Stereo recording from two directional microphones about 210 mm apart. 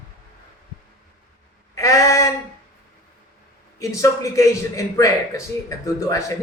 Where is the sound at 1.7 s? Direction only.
15° left (ahead or behind).